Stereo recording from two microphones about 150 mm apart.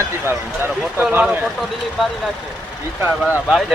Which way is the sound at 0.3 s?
15° right (ahead or behind).